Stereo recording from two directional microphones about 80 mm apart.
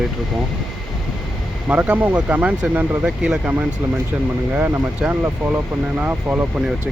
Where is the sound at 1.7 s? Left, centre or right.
Centre.